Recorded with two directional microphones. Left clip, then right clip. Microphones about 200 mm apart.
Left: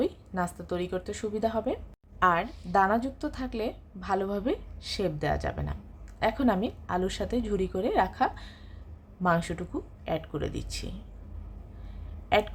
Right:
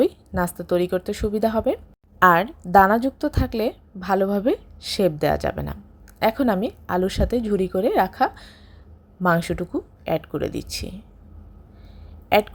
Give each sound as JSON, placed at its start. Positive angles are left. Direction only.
{"t": 0.0, "sound": "a woman's voice", "side_deg": -30}
{"t": 12.3, "sound": "a woman's voice", "side_deg": -25}